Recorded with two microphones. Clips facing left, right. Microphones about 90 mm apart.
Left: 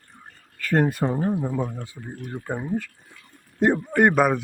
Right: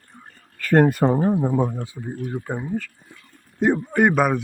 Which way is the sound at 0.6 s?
55° right (ahead or behind).